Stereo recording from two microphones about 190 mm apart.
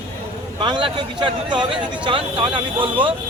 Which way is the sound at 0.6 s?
25° right (ahead or behind).